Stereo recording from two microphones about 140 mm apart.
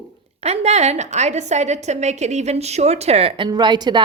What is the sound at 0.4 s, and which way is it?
A woman's voice, 50° right (ahead or behind).